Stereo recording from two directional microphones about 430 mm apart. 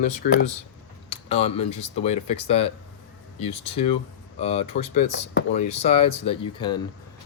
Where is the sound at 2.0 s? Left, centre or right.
Centre.